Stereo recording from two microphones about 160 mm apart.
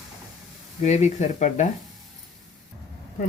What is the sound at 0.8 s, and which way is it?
Speech, 45° left (ahead or behind).